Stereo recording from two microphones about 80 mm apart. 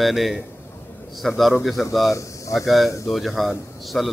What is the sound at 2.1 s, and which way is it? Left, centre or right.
Speech, left.